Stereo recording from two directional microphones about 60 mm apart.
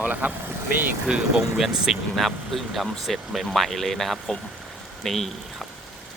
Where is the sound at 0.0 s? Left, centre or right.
Right.